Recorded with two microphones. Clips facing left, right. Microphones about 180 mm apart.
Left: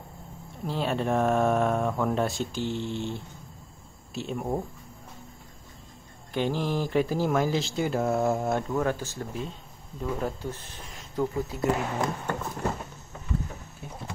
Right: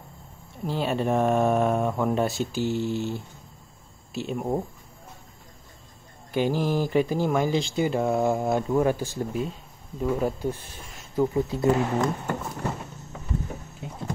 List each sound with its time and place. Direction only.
0.7 s speech: centre (ahead or behind)
6.3 s speech: 5° right (ahead or behind)
8.6 s speech: 10° right (ahead or behind)
11.3 s speech: 20° right (ahead or behind)
13.8 s clip-clop: 15° right (ahead or behind)